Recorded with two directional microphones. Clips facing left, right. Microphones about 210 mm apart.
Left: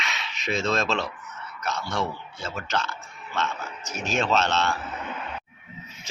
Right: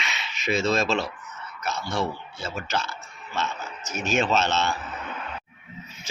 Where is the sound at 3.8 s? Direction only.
35° left (ahead or behind).